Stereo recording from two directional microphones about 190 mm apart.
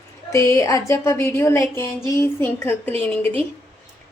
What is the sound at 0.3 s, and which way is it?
A woman's voice, 15° left (ahead or behind).